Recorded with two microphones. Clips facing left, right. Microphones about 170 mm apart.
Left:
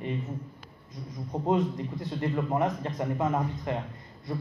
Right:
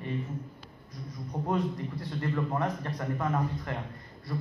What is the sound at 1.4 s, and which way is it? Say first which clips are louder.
A man's voice: left 4 dB; 20° left (ahead or behind).